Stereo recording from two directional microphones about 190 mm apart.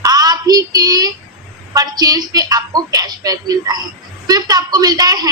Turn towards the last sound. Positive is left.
turn(degrees=-20)  # may be behind; listen again after turning